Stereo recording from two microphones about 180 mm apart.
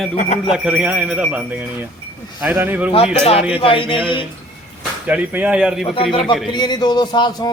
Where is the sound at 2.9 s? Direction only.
30° left (ahead or behind).